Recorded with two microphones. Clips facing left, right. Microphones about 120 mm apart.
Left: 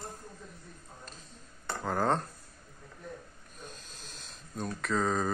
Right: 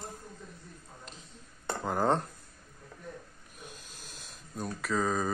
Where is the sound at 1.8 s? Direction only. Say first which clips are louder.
Right 1 dB; 15° right (ahead or behind).